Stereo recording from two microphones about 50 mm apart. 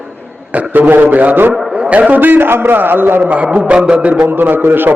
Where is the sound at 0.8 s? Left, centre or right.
Right.